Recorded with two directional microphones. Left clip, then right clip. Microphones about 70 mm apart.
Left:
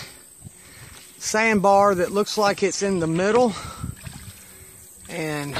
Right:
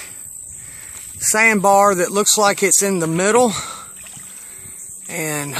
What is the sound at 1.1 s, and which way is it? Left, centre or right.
Speech, right.